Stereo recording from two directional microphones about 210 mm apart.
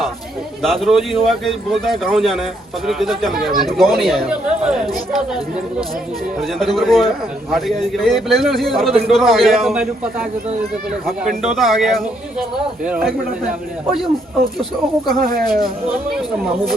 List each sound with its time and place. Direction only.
0.6 s speech: centre (ahead or behind)
6.6 s speech: centre (ahead or behind)
11.4 s speech: centre (ahead or behind)
15.2 s speech: 45° right (ahead or behind)